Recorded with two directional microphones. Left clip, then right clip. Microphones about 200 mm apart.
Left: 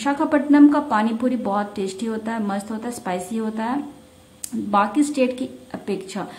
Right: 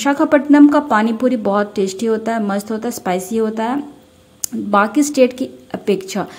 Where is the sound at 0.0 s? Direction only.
30° right (ahead or behind).